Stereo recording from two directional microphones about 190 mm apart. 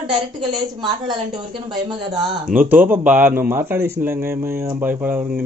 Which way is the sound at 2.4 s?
10° right (ahead or behind).